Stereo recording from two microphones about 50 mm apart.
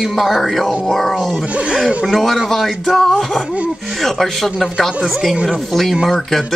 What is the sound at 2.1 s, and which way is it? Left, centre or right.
Speech, centre.